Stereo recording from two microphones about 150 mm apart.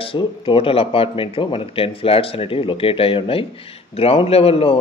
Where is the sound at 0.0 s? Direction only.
40° left (ahead or behind).